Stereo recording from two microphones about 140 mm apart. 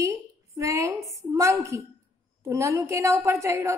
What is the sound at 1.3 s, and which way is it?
A woman's voice, 20° right (ahead or behind).